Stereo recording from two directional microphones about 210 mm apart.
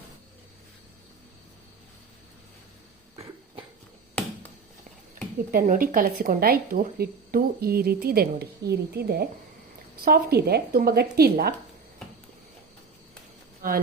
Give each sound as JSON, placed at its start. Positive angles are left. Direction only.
{"t": 5.5, "sound": "speech", "side_deg": -45}